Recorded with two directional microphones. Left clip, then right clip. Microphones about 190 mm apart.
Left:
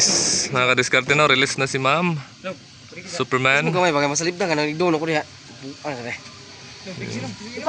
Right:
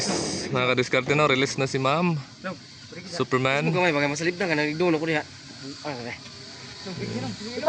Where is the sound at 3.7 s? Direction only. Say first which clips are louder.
Left 4 dB; 35° left (ahead or behind).